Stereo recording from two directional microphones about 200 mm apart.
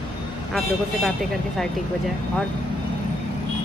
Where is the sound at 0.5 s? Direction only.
Centre (ahead or behind).